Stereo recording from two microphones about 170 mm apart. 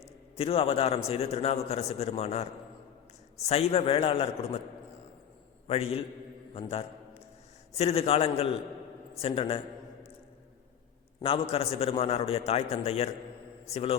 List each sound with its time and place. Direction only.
0.3 s a man's voice: 35° left (ahead or behind)
5.6 s a man's voice: 35° left (ahead or behind)
11.2 s a man's voice: 35° left (ahead or behind)